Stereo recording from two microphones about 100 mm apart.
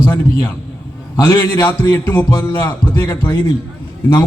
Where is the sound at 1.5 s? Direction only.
35° left (ahead or behind).